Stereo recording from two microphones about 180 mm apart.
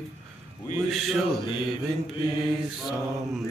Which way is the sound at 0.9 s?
Centre (ahead or behind).